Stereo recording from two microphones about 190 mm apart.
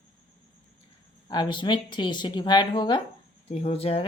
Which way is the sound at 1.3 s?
25° left (ahead or behind).